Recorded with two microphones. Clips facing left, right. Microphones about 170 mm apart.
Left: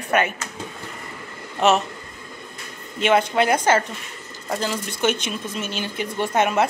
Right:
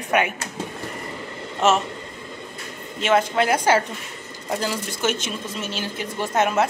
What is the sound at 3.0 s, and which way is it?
Speech, centre (ahead or behind).